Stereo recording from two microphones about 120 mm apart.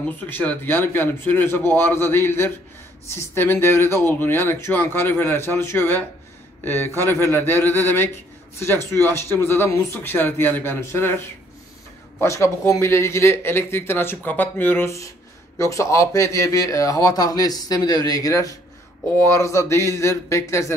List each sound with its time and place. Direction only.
0.3 s speech: 15° left (ahead or behind)